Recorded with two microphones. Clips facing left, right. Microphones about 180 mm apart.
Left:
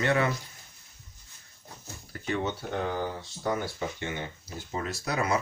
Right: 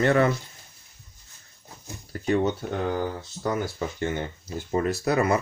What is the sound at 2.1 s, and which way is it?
Speech, 40° right (ahead or behind).